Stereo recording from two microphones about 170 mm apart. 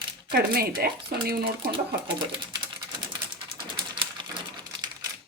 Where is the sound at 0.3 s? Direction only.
65° right (ahead or behind).